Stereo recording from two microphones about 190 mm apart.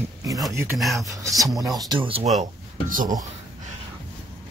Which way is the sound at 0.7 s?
Centre (ahead or behind).